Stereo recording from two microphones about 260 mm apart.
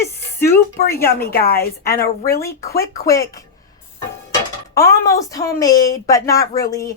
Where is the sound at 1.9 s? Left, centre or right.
Left.